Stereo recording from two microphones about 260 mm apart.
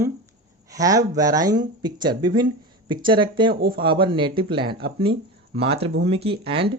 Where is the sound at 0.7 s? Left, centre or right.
Centre.